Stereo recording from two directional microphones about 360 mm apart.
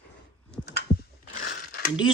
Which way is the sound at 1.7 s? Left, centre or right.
Left.